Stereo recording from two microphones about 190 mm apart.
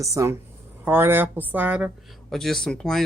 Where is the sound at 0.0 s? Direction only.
15° right (ahead or behind).